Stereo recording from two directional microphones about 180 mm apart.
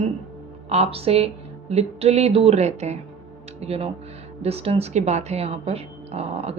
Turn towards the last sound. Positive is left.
turn(degrees=-35)  # may be behind; listen again after turning